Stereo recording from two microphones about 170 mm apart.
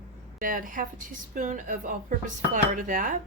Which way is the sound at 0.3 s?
55° right (ahead or behind).